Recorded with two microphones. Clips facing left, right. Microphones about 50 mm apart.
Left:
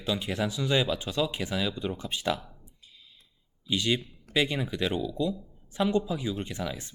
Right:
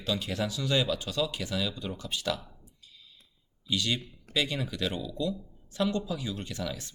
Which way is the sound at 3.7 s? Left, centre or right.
Left.